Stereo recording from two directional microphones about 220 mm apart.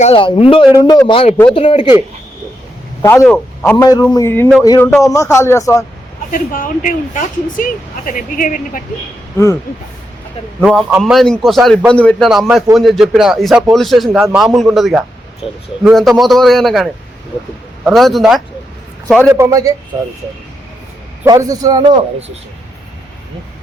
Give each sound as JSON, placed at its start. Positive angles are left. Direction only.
{"t": 0.0, "sound": "speech", "side_deg": 25}
{"t": 3.0, "sound": "a man's voice", "side_deg": 10}
{"t": 6.3, "sound": "speech", "side_deg": 40}
{"t": 10.6, "sound": "speech", "side_deg": -5}
{"t": 15.4, "sound": "speech", "side_deg": 25}
{"t": 15.8, "sound": "a man's voice", "side_deg": 0}
{"t": 19.3, "sound": "a man's voice", "side_deg": -15}
{"t": 21.2, "sound": "a man's voice", "side_deg": -15}